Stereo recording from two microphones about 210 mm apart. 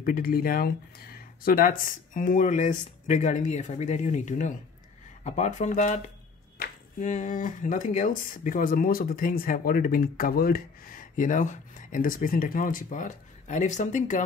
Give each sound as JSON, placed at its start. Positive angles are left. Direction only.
{"t": 0.0, "sound": "speech", "side_deg": 40}